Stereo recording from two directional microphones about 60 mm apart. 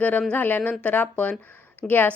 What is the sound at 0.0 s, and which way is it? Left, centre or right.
A woman's voice, left.